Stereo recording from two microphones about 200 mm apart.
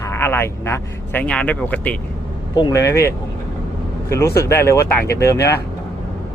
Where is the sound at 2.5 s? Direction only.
20° left (ahead or behind).